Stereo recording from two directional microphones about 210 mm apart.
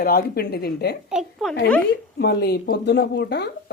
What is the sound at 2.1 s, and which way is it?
Speech, 50° left (ahead or behind).